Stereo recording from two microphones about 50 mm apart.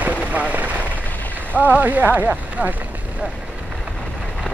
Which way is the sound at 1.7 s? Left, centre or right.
Right.